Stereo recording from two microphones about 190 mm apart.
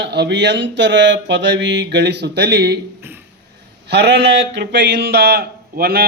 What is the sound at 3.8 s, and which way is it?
A man's voice, 60° right (ahead or behind).